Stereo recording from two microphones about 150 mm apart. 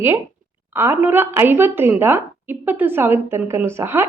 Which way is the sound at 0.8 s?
15° right (ahead or behind).